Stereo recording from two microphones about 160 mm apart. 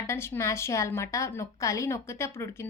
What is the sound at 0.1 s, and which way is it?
A woman's voice, 15° left (ahead or behind).